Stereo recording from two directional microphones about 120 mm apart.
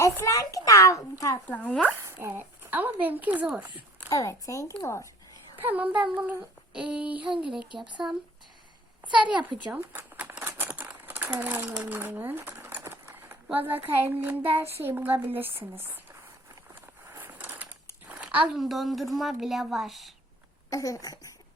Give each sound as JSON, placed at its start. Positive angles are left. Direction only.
{"t": 0.0, "sound": "a child's voice", "side_deg": 25}
{"t": 1.5, "sound": "speech", "side_deg": 15}
{"t": 2.0, "sound": "speech", "side_deg": -20}
{"t": 4.1, "sound": "speech", "side_deg": 25}
{"t": 5.5, "sound": "a woman's voice", "side_deg": -15}
{"t": 9.7, "sound": "a sound", "side_deg": -15}
{"t": 10.4, "sound": "crumpling", "side_deg": -15}
{"t": 13.9, "sound": "speech", "side_deg": -15}
{"t": 17.1, "sound": "a sound", "side_deg": -15}
{"t": 18.1, "sound": "a woman's voice", "side_deg": -10}
{"t": 20.7, "sound": "speech", "side_deg": 30}